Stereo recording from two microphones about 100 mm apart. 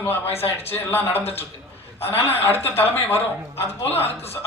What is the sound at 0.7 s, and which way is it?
A woman's voice, 20° left (ahead or behind).